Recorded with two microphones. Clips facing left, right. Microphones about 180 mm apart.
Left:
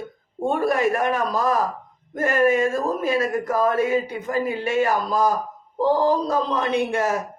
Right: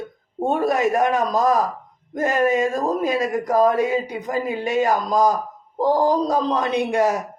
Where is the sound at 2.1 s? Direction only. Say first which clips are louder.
Even; 20° right (ahead or behind).